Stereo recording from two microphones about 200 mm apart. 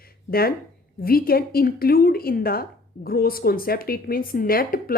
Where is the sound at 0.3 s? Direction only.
50° left (ahead or behind).